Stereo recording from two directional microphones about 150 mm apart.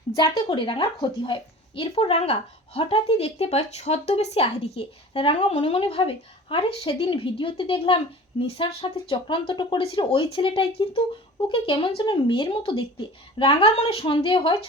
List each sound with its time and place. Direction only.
0.2 s speech: 35° left (ahead or behind)